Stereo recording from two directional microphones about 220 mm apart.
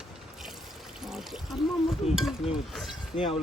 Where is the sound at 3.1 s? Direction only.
25° left (ahead or behind).